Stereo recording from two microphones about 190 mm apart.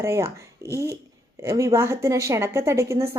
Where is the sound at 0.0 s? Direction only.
15° right (ahead or behind).